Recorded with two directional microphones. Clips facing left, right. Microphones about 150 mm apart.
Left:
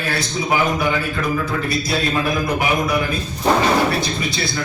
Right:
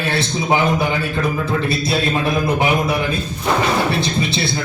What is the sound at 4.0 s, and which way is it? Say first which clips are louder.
Speech: right 3 dB; 25° right (ahead or behind).